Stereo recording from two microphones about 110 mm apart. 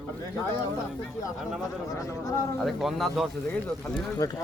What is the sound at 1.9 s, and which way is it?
Speech, 30° left (ahead or behind).